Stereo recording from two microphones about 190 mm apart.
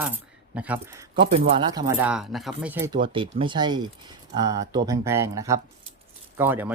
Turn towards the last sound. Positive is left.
turn(degrees=-10)  # may be behind; listen again after turning